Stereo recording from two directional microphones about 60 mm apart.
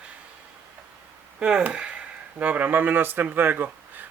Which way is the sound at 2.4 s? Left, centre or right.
Right.